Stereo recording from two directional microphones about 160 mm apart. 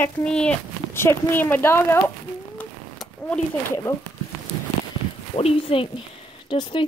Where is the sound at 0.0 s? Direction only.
5° left (ahead or behind).